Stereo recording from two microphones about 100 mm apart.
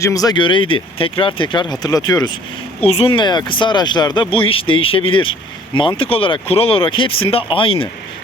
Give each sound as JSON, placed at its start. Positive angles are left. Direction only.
{"t": 0.0, "sound": "speech", "side_deg": 35}
{"t": 0.3, "sound": "speech", "side_deg": 55}
{"t": 1.3, "sound": "speech", "side_deg": 45}
{"t": 2.8, "sound": "speech", "side_deg": 85}
{"t": 3.2, "sound": "speech", "side_deg": 50}